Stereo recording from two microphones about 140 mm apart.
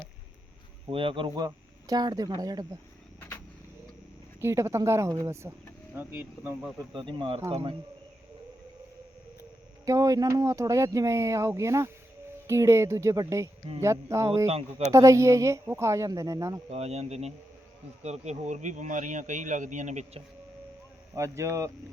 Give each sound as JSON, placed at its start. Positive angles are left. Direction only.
{"t": 0.9, "sound": "speech", "side_deg": -40}
{"t": 4.4, "sound": "speech", "side_deg": -20}
{"t": 6.7, "sound": "speech", "side_deg": -35}
{"t": 9.8, "sound": "speech", "side_deg": -25}
{"t": 16.6, "sound": "speech", "side_deg": -50}
{"t": 21.2, "sound": "speech", "side_deg": -20}